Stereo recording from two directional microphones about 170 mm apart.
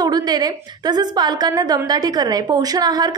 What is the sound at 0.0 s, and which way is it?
A woman's voice, 25° right (ahead or behind).